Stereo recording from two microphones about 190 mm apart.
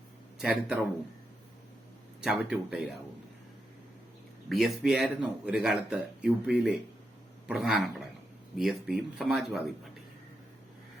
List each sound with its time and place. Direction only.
0.3 s speech: 5° right (ahead or behind)
2.2 s speech: 5° right (ahead or behind)
4.4 s speech: centre (ahead or behind)